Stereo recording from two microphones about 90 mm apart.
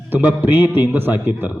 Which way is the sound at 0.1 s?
20° right (ahead or behind).